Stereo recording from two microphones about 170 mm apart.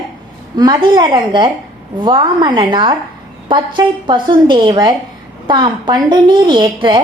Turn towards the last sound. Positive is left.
turn(degrees=-30)  # may be behind; listen again after turning